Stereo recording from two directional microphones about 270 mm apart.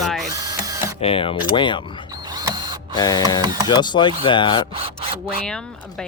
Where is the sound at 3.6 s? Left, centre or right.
Centre.